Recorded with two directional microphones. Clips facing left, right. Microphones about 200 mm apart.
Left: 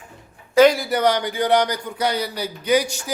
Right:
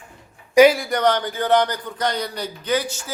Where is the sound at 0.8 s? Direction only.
5° left (ahead or behind).